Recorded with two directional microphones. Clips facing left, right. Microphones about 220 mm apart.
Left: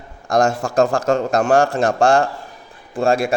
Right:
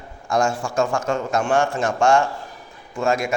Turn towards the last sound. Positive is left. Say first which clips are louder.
# left 4 dB
turn(degrees=30)  # may be behind; listen again after turning